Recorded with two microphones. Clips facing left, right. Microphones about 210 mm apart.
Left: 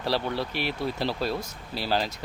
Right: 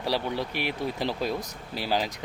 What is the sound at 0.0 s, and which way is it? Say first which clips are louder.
Speech: left 1 dB; 10° right (ahead or behind).